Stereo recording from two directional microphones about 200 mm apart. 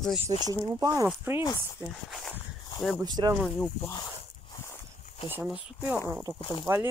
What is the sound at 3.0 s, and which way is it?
Speech, 20° right (ahead or behind).